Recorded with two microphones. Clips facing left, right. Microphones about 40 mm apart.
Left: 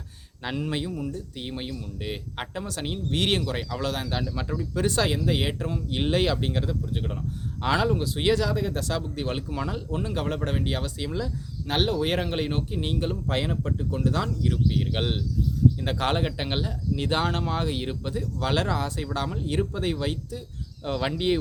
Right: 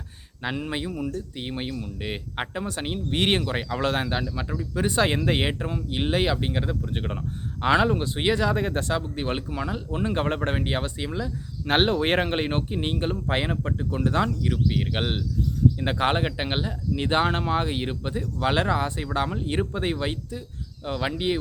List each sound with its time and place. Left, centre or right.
0.4 s speech: centre; by 4.1 s right
4.1 s speech: centre
5.0 s speech: right
5.5 s speech: right
5.9 s speech: centre
6.8 s speech: right
8.5 s speech: right
8.9 s speech: right
9.5 s speech: centre
9.9 s speech: right
11.6 s speech: right
14.3 s speech: centre
20.8 s speech: centre